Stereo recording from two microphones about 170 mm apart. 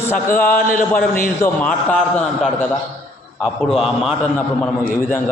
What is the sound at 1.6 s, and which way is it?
A man's voice, 5° left (ahead or behind).